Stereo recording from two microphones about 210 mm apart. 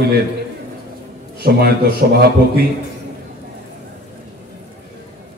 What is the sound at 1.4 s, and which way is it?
Speech, 50° right (ahead or behind).